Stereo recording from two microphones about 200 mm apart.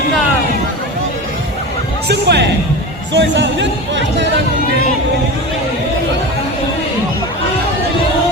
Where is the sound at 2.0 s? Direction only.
55° right (ahead or behind).